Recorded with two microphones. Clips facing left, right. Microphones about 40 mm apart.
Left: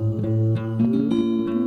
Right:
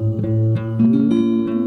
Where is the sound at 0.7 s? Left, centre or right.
Right.